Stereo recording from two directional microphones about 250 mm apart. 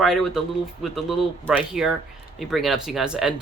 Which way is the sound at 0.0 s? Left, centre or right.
Centre.